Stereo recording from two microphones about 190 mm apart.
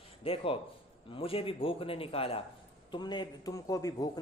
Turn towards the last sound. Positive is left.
turn(degrees=20)  # may be behind; listen again after turning